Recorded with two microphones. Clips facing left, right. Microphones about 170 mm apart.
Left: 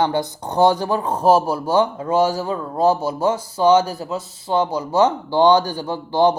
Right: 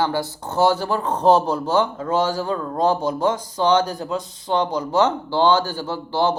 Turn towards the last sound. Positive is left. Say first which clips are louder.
# left 4 dB
turn(degrees=15)  # may be behind; listen again after turning